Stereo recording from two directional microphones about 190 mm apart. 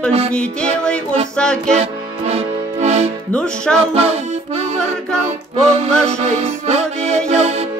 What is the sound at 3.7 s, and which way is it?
Music, 35° right (ahead or behind).